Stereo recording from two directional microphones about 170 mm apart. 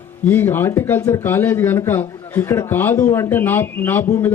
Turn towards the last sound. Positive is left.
turn(degrees=15)  # may be behind; listen again after turning